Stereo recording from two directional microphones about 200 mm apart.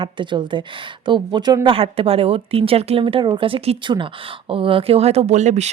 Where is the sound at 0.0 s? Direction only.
25° right (ahead or behind).